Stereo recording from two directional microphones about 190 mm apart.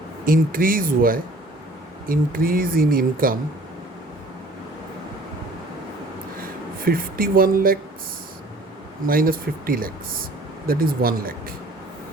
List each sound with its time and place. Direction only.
0.3 s speech: 50° right (ahead or behind)
6.4 s speech: 50° right (ahead or behind)
9.0 s speech: 50° right (ahead or behind)